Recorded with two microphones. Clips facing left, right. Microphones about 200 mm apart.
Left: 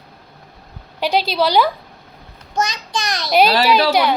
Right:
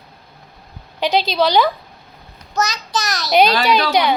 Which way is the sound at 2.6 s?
20° left (ahead or behind).